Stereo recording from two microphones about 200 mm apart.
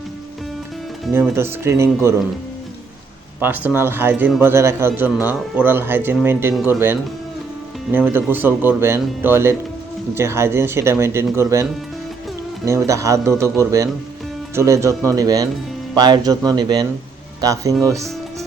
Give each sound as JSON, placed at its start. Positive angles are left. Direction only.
{"t": 1.1, "sound": "a man's voice", "side_deg": -10}
{"t": 3.4, "sound": "a man's voice", "side_deg": -10}